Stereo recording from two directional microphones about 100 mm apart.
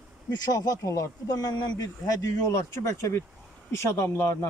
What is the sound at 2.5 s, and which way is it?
Speech, 30° left (ahead or behind).